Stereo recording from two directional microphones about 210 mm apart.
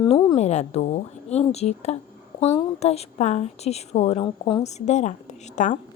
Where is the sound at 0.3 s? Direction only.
30° left (ahead or behind).